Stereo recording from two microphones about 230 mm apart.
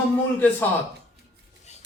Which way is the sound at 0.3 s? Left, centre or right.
Centre.